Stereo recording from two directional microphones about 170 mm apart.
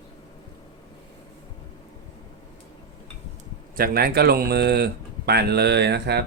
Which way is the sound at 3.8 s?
65° right (ahead or behind).